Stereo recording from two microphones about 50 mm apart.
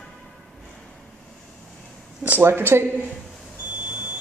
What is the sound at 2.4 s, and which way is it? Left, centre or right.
Speech, right.